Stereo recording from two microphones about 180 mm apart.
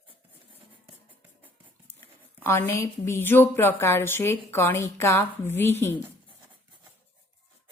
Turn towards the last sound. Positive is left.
turn(degrees=10)  # may be behind; listen again after turning